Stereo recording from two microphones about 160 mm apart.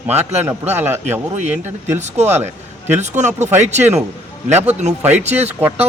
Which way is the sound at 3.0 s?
45° right (ahead or behind).